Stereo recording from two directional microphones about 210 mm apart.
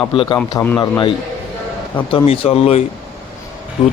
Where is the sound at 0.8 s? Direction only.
25° left (ahead or behind).